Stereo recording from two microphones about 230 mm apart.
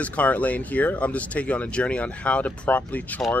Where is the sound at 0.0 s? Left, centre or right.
Centre.